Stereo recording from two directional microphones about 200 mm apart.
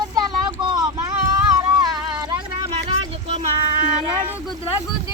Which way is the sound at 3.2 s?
25° right (ahead or behind).